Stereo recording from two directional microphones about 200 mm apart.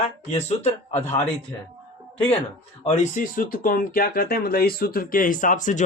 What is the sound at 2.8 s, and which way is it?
Speech, 40° left (ahead or behind).